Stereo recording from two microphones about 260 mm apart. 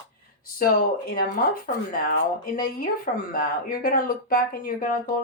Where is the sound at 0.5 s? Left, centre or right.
Left.